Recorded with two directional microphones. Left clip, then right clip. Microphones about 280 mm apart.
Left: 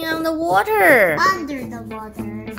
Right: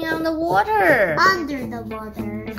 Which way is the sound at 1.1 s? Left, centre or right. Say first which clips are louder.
Right 1 dB; centre.